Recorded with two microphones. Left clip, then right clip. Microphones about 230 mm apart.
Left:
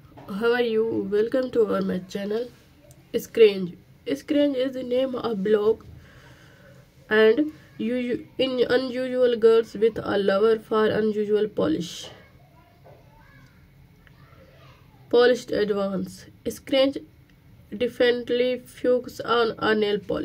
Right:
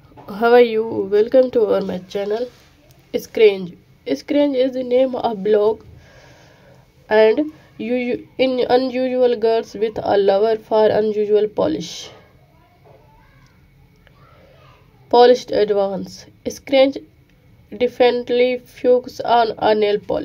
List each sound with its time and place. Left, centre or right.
0.4 s speech: centre
15.0 s a woman's voice: centre